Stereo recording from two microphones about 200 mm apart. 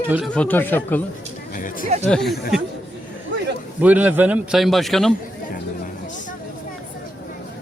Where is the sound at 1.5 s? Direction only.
45° left (ahead or behind).